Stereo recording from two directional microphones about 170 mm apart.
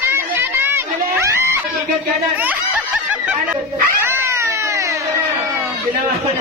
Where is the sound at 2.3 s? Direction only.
10° right (ahead or behind).